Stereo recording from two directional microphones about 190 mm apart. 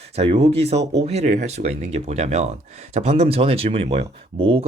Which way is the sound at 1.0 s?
35° right (ahead or behind).